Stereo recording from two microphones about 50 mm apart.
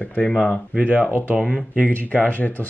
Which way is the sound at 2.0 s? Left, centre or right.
Left.